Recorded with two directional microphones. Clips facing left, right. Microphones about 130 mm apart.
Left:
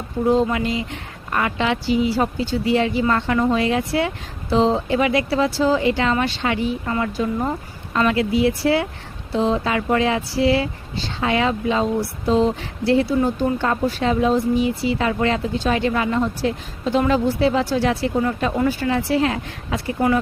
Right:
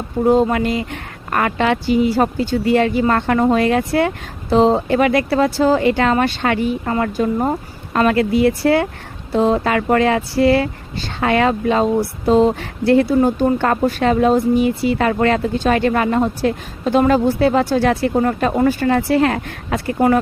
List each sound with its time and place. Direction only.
0.5 s speech: 55° right (ahead or behind)
7.0 s speech: 45° right (ahead or behind)